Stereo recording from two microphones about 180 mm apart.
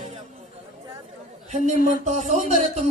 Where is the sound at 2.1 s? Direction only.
40° right (ahead or behind).